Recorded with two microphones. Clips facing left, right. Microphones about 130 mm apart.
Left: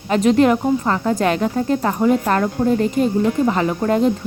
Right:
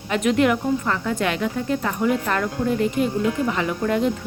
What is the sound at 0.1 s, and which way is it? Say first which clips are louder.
Speech: left 5 dB; 35° left (ahead or behind).